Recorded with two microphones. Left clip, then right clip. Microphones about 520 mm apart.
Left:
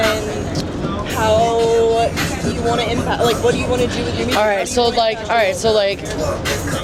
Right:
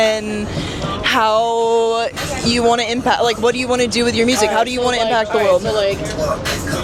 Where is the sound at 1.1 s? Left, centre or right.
Right.